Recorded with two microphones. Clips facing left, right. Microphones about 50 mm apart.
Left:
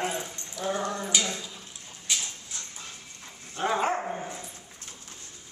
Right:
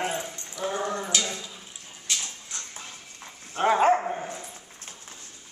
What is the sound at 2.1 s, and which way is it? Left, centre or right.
Dog, centre.